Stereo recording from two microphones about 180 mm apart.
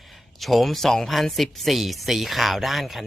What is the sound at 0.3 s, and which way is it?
Speech, centre (ahead or behind).